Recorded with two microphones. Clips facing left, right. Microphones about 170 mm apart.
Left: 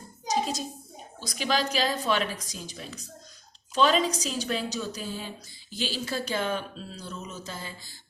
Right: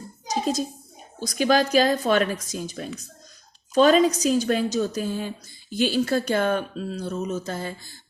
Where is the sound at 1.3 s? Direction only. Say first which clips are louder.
Right 8 dB; 50° right (ahead or behind).